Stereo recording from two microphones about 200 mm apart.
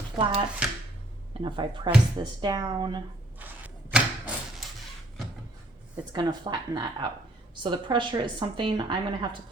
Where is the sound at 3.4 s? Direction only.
10° right (ahead or behind).